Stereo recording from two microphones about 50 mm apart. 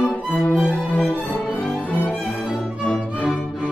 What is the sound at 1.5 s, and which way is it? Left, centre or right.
Violin, left.